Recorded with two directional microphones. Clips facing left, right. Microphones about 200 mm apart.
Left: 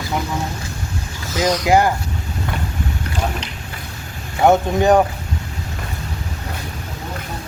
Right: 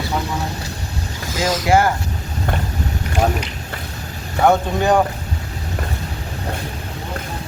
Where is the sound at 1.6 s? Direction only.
20° left (ahead or behind).